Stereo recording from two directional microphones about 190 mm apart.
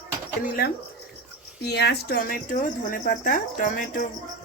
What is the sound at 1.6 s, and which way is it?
Speech, 60° left (ahead or behind).